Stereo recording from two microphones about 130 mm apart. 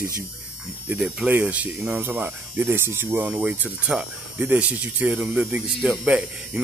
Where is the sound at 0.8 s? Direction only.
10° right (ahead or behind).